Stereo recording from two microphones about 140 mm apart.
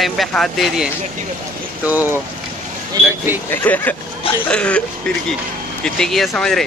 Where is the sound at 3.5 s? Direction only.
15° left (ahead or behind).